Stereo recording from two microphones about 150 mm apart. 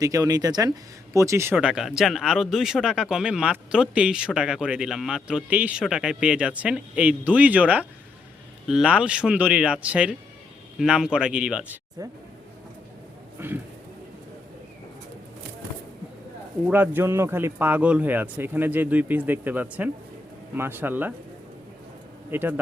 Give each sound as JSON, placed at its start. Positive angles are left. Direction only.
{"t": 0.0, "sound": "a man's voice", "side_deg": -25}
{"t": 12.0, "sound": "speech", "side_deg": -25}
{"t": 13.4, "sound": "a man's voice", "side_deg": -15}
{"t": 16.6, "sound": "a man's voice", "side_deg": -10}
{"t": 22.3, "sound": "speech", "side_deg": -15}